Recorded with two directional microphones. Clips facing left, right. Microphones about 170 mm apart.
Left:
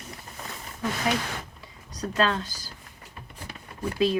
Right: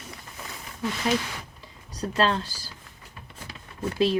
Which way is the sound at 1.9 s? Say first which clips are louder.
Right 1 dB; 30° right (ahead or behind).